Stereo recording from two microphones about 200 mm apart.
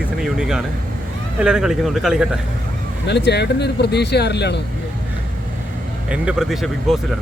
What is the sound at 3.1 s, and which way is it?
Speech, 60° left (ahead or behind).